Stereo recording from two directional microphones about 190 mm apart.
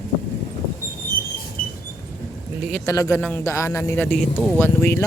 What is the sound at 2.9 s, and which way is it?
Speech, 15° left (ahead or behind).